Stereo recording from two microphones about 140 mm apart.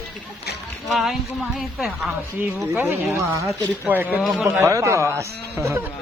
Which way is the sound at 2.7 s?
15° right (ahead or behind).